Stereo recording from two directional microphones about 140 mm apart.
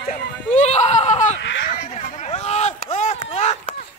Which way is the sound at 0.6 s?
50° left (ahead or behind).